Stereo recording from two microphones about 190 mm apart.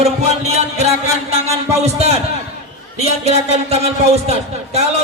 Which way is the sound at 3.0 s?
35° right (ahead or behind).